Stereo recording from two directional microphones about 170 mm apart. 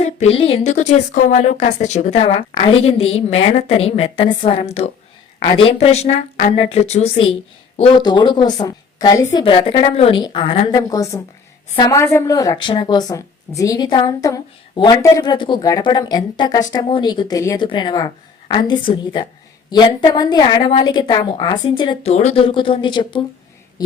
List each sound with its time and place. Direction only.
0.0 s a woman's voice: 40° left (ahead or behind)
7.8 s a woman's voice: 25° left (ahead or behind)
10.7 s a woman's voice: 20° left (ahead or behind)
22.1 s a woman's voice: 40° left (ahead or behind)